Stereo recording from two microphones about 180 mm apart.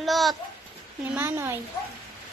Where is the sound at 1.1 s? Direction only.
15° right (ahead or behind).